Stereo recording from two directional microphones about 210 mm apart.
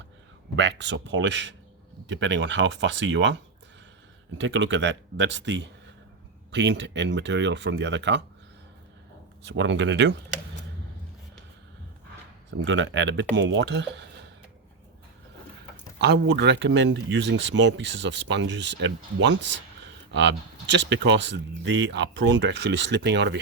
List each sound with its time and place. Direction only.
0.5 s speech: 60° right (ahead or behind)
9.5 s speech: 60° right (ahead or behind)
12.5 s speech: 60° right (ahead or behind)
16.0 s speech: 50° right (ahead or behind)